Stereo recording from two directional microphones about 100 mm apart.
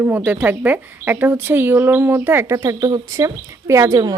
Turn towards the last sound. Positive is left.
turn(degrees=-35)  # may be behind; listen again after turning